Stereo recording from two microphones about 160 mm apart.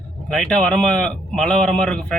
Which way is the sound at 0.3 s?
5° left (ahead or behind).